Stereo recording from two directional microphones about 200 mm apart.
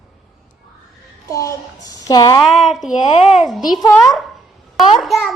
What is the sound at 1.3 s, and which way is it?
A woman's voice, 15° left (ahead or behind).